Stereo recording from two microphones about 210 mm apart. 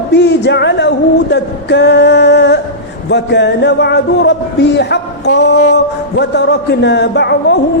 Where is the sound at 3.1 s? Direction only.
55° left (ahead or behind).